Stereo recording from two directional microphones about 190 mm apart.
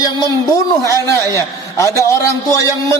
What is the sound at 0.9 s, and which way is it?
A man's voice, 15° left (ahead or behind).